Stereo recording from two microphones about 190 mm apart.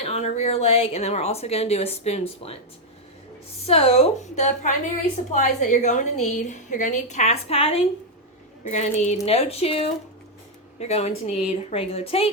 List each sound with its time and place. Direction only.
0.0 s a woman's voice: 35° left (ahead or behind)
3.6 s a woman's voice: 30° left (ahead or behind)